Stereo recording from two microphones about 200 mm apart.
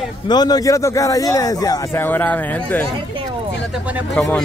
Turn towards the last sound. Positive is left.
turn(degrees=5)  # may be behind; listen again after turning